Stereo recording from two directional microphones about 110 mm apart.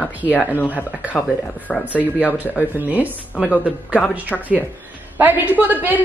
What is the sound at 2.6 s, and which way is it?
Speech, 15° right (ahead or behind).